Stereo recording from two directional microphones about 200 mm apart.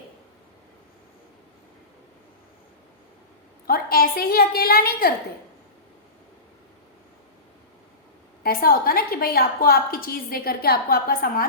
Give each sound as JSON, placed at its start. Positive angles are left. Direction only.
{"t": 3.7, "sound": "a woman's voice", "side_deg": 45}
{"t": 8.4, "sound": "a woman's voice", "side_deg": 45}